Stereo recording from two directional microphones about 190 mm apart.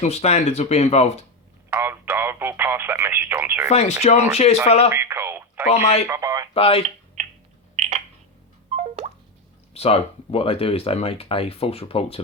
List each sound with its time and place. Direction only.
0.0 s speech: 35° left (ahead or behind)
1.7 s speech: 10° right (ahead or behind)
3.7 s speech: 35° left (ahead or behind)
4.9 s radio: 15° right (ahead or behind)
5.6 s speech: 35° left (ahead or behind)
6.1 s speech: 15° right (ahead or behind)
6.5 s speech: 30° left (ahead or behind)
7.8 s a sound: 35° right (ahead or behind)
9.7 s speech: 30° left (ahead or behind)